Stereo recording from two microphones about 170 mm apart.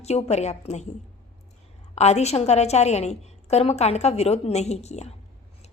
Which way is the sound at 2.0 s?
40° left (ahead or behind).